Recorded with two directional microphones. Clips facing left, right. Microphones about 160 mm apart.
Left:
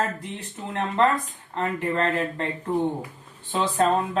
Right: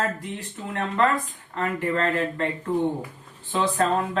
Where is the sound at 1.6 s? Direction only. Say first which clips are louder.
Even; 20° left (ahead or behind).